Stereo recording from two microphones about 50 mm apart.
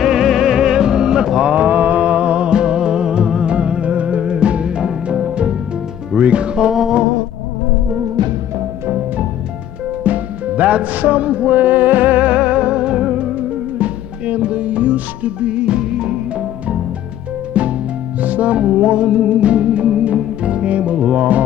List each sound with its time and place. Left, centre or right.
0.0 s music: centre
1.5 s music: right
6.7 s a sound: centre
10.0 s music: right
17.6 s music: right